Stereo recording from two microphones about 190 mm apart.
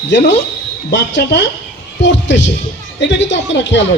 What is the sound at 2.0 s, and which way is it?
A woman's voice, 70° left (ahead or behind).